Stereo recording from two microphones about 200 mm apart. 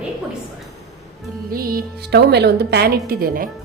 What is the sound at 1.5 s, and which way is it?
A woman's voice, 50° right (ahead or behind).